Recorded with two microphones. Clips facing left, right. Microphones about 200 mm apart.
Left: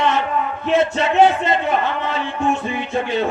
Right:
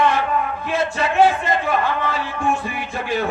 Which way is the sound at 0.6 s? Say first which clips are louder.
Left 8 dB; 25° left (ahead or behind).